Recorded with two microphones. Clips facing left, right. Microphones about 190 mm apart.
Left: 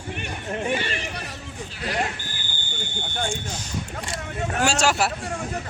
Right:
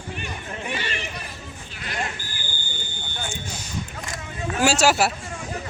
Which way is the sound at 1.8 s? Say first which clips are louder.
Left 4 dB; 35° left (ahead or behind).